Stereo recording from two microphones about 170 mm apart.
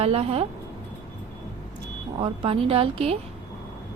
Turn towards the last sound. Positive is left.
turn(degrees=-35)  # may be behind; listen again after turning